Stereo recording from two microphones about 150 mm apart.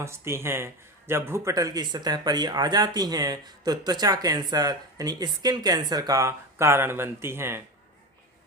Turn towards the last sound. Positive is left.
turn(degrees=-15)  # may be behind; listen again after turning